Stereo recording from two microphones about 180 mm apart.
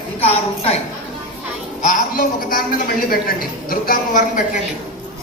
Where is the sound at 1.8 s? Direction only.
50° left (ahead or behind).